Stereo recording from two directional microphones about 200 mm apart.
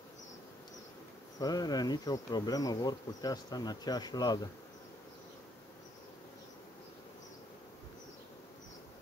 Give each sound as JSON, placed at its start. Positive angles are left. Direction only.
{"t": 1.4, "sound": "insect", "side_deg": 20}